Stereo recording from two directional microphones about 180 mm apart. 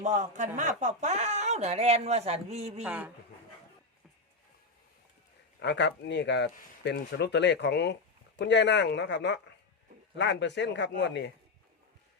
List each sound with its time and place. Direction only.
0.0 s speech: 40° right (ahead or behind)
2.8 s speech: 10° right (ahead or behind)
5.5 s speech: 80° left